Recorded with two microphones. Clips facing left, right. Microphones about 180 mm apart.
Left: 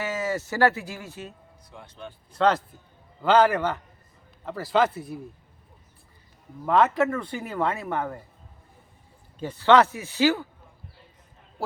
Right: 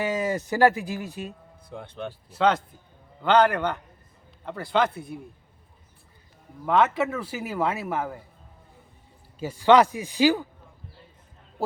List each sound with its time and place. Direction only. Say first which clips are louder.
0.0 s speech: right 2 dB; 15° right (ahead or behind)
1.7 s speech: right 7 dB; 65° right (ahead or behind)
2.3 s speech: even; centre (ahead or behind)
6.7 s speech: left 1 dB; centre (ahead or behind)
9.4 s speech: right 1 dB; 10° right (ahead or behind)